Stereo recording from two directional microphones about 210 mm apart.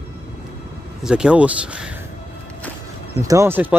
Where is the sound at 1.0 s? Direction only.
5° right (ahead or behind).